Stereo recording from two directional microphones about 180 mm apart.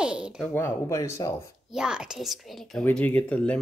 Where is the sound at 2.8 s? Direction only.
10° left (ahead or behind).